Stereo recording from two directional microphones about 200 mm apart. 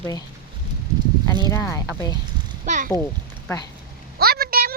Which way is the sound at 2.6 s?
40° right (ahead or behind).